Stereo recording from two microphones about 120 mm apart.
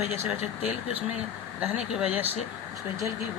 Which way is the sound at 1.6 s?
5° right (ahead or behind).